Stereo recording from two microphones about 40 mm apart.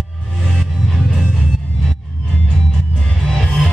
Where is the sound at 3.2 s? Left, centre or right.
Centre.